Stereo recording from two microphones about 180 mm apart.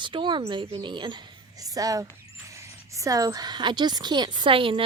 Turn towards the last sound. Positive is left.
turn(degrees=-30)  # may be behind; listen again after turning